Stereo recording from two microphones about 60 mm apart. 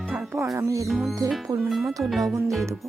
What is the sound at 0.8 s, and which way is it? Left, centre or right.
Music, centre.